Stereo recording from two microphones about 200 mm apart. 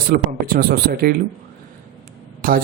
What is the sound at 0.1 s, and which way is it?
A man's voice, 45° right (ahead or behind).